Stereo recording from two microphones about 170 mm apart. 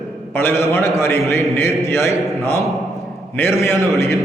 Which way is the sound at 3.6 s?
15° left (ahead or behind).